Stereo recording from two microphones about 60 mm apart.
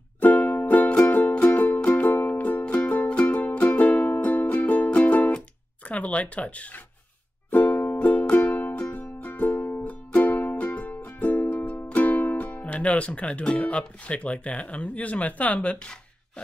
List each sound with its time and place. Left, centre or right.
0.2 s music: left
5.9 s speech: left
7.5 s music: left